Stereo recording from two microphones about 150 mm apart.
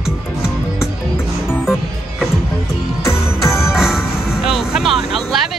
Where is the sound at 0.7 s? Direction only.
15° left (ahead or behind).